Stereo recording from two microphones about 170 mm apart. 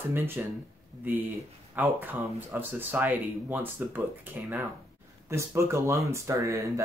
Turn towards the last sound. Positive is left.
turn(degrees=-20)  # may be behind; listen again after turning